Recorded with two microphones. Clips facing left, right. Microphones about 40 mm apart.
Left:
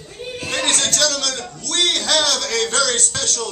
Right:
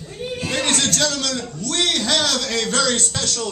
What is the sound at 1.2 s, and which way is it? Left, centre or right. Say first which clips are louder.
A man's voice: right 1 dB; left.